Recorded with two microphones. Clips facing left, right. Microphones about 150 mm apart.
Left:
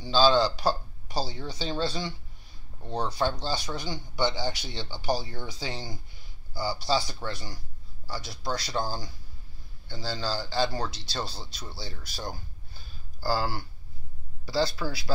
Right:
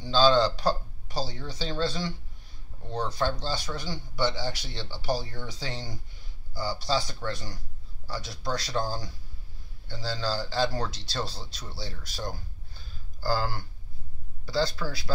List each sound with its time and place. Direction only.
0.0 s speech: 5° left (ahead or behind)